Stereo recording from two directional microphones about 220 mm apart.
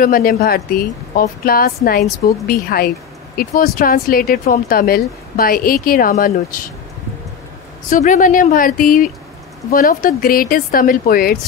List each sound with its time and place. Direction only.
0.0 s speech: 40° left (ahead or behind)
7.9 s speech: 35° left (ahead or behind)